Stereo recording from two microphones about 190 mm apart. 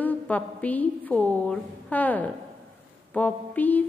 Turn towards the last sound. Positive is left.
turn(degrees=10)  # may be behind; listen again after turning